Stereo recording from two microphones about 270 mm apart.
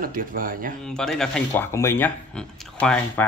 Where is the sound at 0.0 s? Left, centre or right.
Right.